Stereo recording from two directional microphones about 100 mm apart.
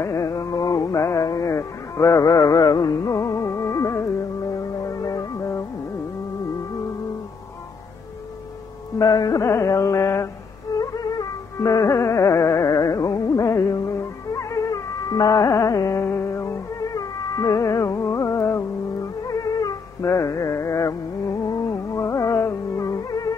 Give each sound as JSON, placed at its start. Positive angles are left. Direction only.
{"t": 0.0, "sound": "music", "side_deg": 30}
{"t": 9.2, "sound": "carnatic music", "side_deg": 35}
{"t": 10.8, "sound": "music", "side_deg": 35}
{"t": 15.5, "sound": "a sound", "side_deg": 35}
{"t": 19.2, "sound": "music", "side_deg": 35}